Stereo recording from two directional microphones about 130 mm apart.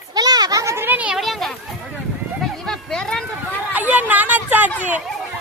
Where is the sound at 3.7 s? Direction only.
10° right (ahead or behind).